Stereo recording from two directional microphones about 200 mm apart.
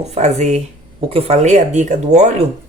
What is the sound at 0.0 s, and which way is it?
Speech, 35° right (ahead or behind).